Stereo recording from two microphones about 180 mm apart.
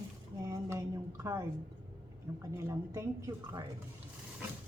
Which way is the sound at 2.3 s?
15° right (ahead or behind).